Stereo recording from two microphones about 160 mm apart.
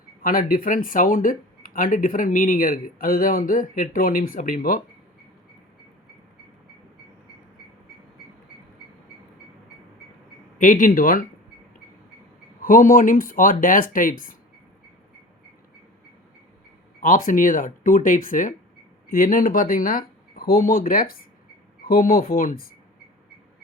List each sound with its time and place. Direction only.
0.2 s speech: 60° left (ahead or behind)
10.6 s speech: 55° left (ahead or behind)
12.6 s speech: 60° left (ahead or behind)
17.0 s speech: 60° left (ahead or behind)